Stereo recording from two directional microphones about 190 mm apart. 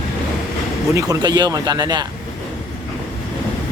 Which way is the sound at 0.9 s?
20° right (ahead or behind).